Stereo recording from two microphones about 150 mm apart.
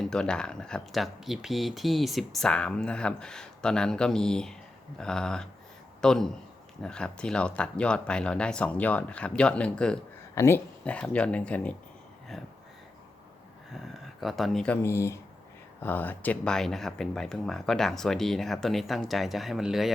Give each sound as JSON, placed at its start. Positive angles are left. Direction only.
{"t": 0.0, "sound": "speech", "side_deg": 5}
{"t": 13.8, "sound": "speech", "side_deg": 0}
{"t": 14.8, "sound": "speech", "side_deg": 15}